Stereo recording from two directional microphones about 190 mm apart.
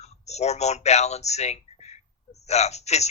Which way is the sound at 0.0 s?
35° left (ahead or behind).